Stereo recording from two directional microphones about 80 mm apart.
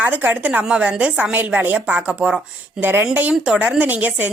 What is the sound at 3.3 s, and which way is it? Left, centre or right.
Speech, centre.